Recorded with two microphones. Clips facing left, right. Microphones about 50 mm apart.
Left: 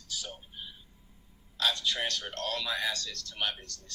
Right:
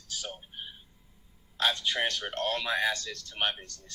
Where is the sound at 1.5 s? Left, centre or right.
Right.